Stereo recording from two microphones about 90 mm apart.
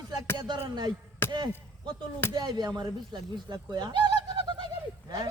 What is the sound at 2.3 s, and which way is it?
Speech, 55° right (ahead or behind).